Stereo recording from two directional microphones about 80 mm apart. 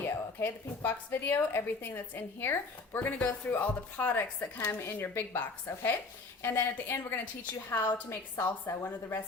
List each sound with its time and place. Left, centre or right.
0.0 s a woman's voice: left